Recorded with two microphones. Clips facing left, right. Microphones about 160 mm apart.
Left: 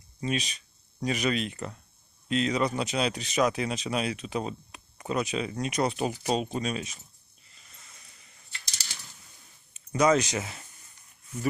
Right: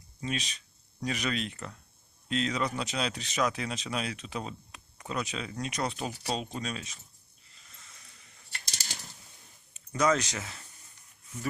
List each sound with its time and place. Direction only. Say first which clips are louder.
0.2 s speech: left 4 dB; 5° left (ahead or behind)
8.5 s typing: right 2 dB; 45° right (ahead or behind)
9.9 s speech: left 4 dB; 15° left (ahead or behind)